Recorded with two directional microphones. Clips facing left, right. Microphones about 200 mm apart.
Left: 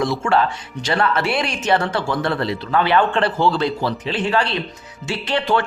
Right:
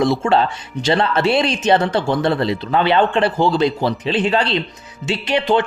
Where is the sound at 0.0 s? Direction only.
25° right (ahead or behind).